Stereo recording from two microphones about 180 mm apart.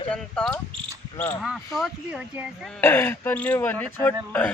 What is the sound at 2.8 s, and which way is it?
Speech, 10° left (ahead or behind).